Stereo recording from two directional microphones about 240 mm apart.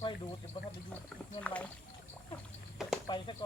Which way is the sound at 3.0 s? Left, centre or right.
Centre.